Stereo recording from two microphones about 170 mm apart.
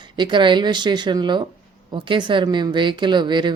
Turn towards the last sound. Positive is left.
turn(degrees=-25)  # may be behind; listen again after turning